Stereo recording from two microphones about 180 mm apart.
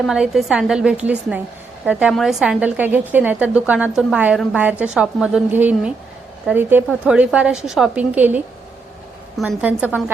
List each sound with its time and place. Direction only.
0.0 s a woman's voice: centre (ahead or behind)
9.4 s a woman's voice: 5° right (ahead or behind)